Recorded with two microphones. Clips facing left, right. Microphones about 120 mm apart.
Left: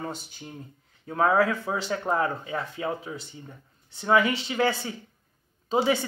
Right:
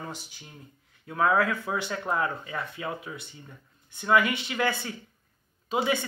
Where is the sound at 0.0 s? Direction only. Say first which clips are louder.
Left 4 dB; 30° left (ahead or behind).